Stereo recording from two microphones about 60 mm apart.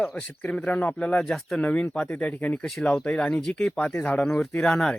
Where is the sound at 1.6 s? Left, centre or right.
Left.